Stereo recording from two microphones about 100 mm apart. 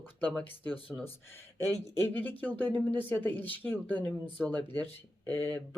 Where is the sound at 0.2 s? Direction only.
15° left (ahead or behind).